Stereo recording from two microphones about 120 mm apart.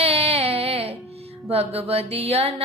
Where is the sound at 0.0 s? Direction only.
55° right (ahead or behind).